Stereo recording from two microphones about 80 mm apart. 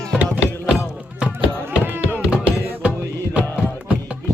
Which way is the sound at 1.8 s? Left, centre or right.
Right.